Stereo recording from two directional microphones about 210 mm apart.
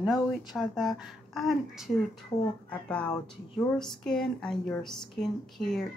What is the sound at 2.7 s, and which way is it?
Speech, 5° left (ahead or behind).